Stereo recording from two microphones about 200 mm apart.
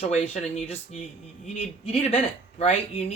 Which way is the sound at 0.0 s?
35° left (ahead or behind).